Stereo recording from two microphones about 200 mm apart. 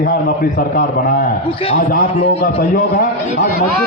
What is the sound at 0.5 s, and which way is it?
A man's voice, 40° left (ahead or behind).